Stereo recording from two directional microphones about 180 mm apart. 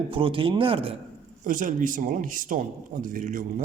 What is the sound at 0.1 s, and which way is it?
Speech, 30° right (ahead or behind).